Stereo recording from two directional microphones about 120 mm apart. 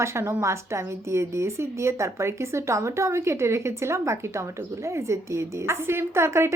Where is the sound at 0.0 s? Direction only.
20° right (ahead or behind).